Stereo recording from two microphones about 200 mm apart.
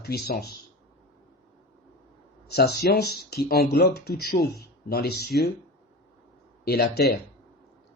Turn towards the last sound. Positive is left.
turn(degrees=55)  # may be behind; listen again after turning